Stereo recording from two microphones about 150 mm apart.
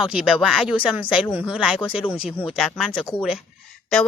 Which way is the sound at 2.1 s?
40° left (ahead or behind).